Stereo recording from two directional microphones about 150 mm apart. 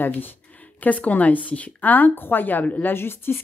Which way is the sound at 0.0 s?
10° left (ahead or behind).